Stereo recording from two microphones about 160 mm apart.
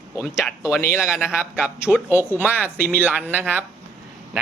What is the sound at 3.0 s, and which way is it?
Speech, 10° right (ahead or behind).